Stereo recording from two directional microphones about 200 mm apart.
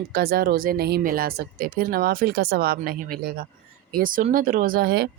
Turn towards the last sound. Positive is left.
turn(degrees=-50)  # may be behind; listen again after turning